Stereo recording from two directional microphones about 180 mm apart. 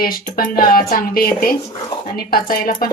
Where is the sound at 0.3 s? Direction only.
55° left (ahead or behind).